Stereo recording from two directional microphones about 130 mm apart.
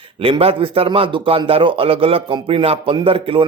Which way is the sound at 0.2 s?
45° right (ahead or behind).